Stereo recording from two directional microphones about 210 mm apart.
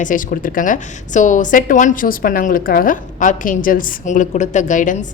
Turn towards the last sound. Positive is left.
turn(degrees=35)  # may be behind; listen again after turning